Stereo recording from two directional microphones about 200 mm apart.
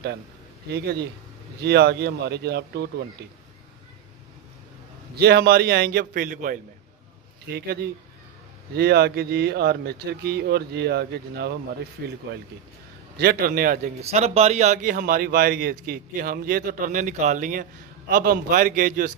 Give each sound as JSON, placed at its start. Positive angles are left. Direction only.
{"t": 0.7, "sound": "a man's voice", "side_deg": -50}
{"t": 5.1, "sound": "a man's voice", "side_deg": -55}
{"t": 13.2, "sound": "a man's voice", "side_deg": -50}